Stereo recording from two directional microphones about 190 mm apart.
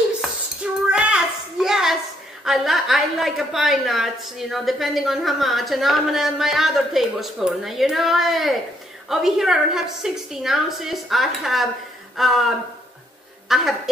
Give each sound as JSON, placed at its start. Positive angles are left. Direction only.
{"t": 0.2, "sound": "dishes", "side_deg": -5}
{"t": 0.8, "sound": "a sound", "side_deg": -5}
{"t": 2.4, "sound": "a woman's voice", "side_deg": 0}